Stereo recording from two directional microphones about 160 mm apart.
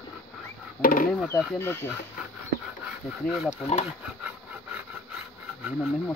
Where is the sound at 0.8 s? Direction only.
60° left (ahead or behind).